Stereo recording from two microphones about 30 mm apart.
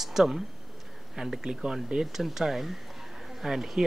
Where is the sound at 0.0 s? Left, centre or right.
Centre.